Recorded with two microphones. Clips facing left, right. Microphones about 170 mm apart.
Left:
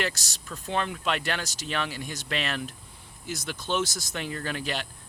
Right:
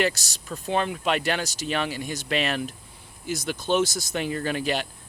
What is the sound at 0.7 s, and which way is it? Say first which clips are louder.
Speech: right 4 dB; 10° right (ahead or behind).